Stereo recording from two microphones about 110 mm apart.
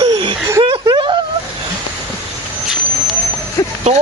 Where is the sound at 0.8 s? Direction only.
45° right (ahead or behind).